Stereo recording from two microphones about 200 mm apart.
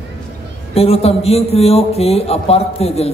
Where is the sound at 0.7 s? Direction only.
30° left (ahead or behind).